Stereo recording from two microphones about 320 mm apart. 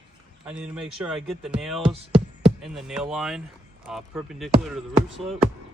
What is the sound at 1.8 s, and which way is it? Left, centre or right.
Speech, centre.